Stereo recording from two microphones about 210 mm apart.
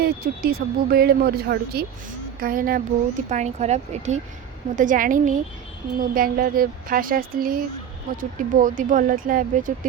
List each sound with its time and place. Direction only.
0.0 s a woman's voice: 45° right (ahead or behind)